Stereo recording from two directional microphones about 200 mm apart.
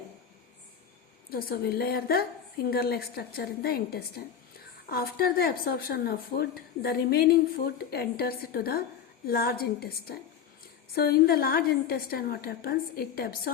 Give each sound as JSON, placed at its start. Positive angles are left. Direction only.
{"t": 1.3, "sound": "speech", "side_deg": 50}